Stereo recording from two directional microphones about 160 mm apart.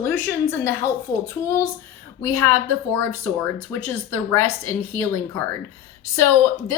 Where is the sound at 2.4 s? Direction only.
15° left (ahead or behind).